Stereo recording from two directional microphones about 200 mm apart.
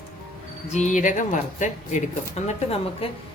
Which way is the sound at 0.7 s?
40° left (ahead or behind).